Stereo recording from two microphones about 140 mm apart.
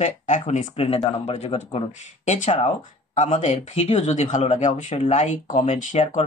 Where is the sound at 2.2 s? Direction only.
60° left (ahead or behind).